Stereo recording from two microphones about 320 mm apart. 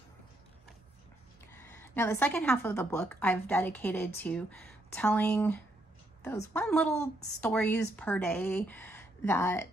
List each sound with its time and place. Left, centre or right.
1.8 s a woman's voice: centre